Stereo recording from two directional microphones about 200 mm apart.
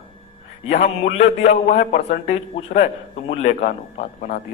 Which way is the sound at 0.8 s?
35° left (ahead or behind).